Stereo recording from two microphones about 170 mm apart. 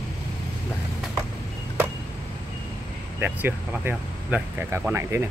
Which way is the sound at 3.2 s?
10° right (ahead or behind).